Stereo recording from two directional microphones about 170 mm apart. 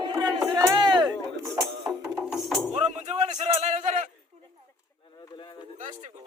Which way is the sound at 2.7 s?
40° right (ahead or behind).